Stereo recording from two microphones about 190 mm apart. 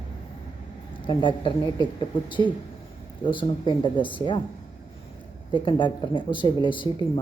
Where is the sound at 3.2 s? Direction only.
25° left (ahead or behind).